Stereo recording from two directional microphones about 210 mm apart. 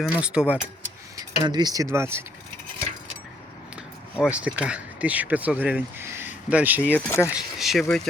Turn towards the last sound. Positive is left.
turn(degrees=0)  # may be behind; listen again after turning